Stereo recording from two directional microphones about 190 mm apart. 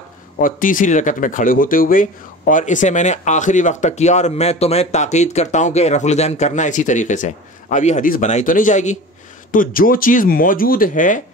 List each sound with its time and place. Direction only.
0.4 s speech: 45° left (ahead or behind)